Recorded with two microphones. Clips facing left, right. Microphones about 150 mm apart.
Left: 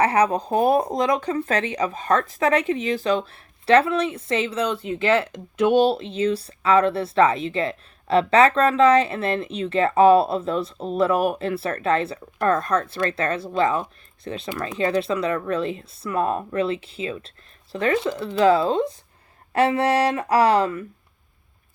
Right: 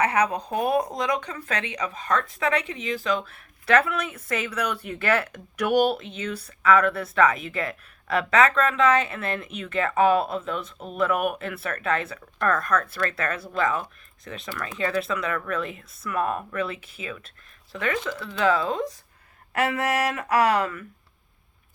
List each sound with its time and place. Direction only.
0.0 s speech: 30° left (ahead or behind)